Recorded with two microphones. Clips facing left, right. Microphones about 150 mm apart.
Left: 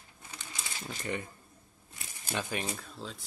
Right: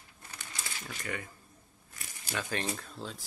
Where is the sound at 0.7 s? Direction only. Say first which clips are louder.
Left 4 dB; 25° left (ahead or behind).